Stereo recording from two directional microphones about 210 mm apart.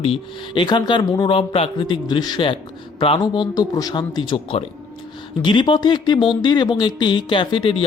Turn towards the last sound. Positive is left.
turn(degrees=25)  # may be behind; listen again after turning